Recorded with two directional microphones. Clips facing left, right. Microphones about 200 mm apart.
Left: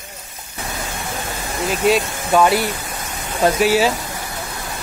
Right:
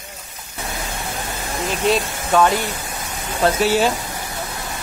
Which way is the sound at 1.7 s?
10° left (ahead or behind).